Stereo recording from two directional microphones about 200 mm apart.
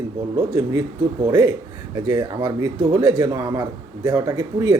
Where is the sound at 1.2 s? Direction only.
20° right (ahead or behind).